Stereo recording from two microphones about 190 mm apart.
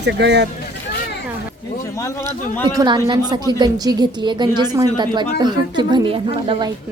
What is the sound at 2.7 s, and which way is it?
A woman's voice, 20° right (ahead or behind).